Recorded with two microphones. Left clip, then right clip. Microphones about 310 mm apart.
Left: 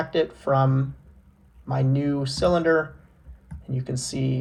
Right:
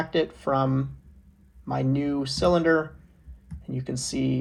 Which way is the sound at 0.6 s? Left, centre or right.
Right.